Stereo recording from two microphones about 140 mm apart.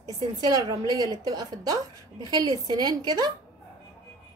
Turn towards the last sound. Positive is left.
turn(degrees=-30)  # may be behind; listen again after turning